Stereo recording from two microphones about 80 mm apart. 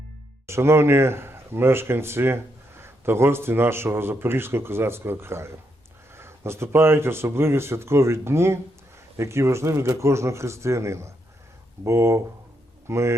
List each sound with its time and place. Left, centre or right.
0.4 s speech: right